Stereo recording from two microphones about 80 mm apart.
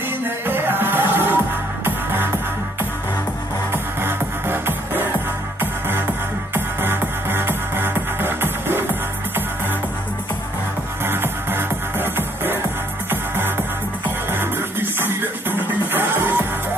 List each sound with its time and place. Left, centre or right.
0.5 s music: right
3.7 s music: right
11.1 s music: right
14.3 s music: right